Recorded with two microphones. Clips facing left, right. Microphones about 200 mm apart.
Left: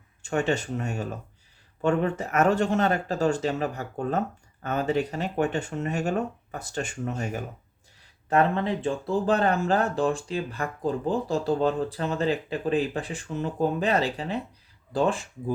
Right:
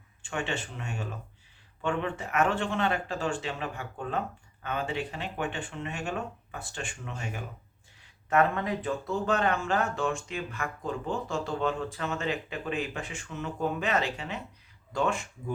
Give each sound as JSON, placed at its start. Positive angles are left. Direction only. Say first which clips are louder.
{"t": 0.2, "sound": "speech", "louder": "left 8 dB", "side_deg": 40}
{"t": 8.3, "sound": "speech", "louder": "left 3 dB", "side_deg": 30}